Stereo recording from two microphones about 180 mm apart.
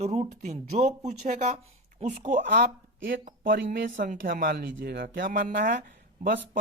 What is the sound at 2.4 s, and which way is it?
Speech, 60° right (ahead or behind).